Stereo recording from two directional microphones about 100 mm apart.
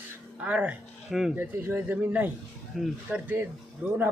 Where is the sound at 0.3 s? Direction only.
15° right (ahead or behind).